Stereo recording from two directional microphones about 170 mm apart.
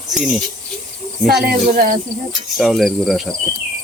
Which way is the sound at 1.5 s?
60° right (ahead or behind).